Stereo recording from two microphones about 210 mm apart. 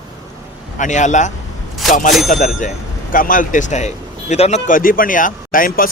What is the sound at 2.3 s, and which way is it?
A man's voice, 35° left (ahead or behind).